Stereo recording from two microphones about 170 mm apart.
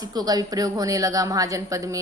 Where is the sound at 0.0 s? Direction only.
25° right (ahead or behind).